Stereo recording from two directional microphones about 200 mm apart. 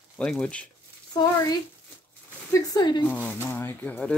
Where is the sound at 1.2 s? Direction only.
15° left (ahead or behind).